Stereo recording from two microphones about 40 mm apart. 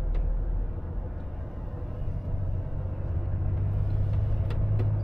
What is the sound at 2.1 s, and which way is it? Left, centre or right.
Vehicle, centre.